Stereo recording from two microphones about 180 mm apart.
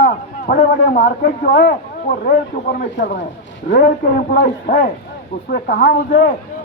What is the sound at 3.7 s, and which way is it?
A man's voice, 50° left (ahead or behind).